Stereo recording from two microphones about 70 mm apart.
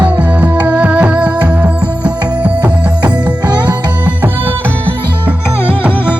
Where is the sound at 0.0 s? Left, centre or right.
Right.